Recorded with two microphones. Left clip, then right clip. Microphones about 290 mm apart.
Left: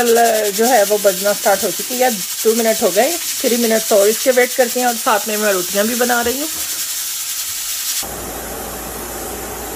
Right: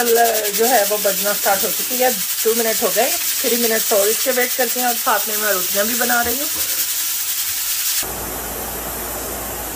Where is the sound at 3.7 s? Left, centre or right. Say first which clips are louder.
Left 6 dB; left.